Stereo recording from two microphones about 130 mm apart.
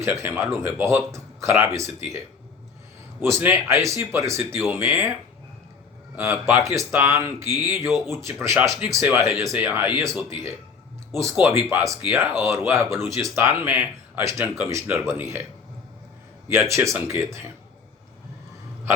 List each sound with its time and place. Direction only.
0.0 s speech: 20° right (ahead or behind)
3.2 s speech: 20° right (ahead or behind)
6.1 s speech: 20° right (ahead or behind)
16.5 s speech: 20° right (ahead or behind)